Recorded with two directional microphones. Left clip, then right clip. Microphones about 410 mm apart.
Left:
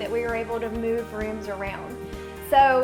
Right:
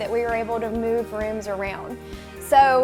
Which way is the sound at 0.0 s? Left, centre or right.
Right.